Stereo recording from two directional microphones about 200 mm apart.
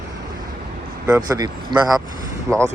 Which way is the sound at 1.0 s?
15° right (ahead or behind).